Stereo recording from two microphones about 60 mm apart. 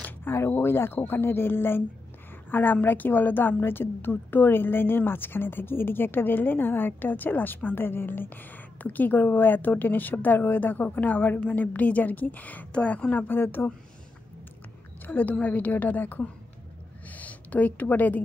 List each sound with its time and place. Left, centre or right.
0.3 s a woman's voice: left
15.0 s a woman's voice: left
17.1 s a sound: left